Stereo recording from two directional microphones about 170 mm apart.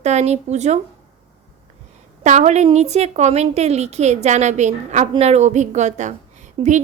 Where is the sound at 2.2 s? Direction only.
45° right (ahead or behind).